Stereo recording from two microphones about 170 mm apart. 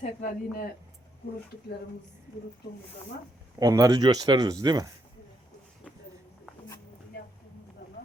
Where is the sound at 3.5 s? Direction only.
20° right (ahead or behind).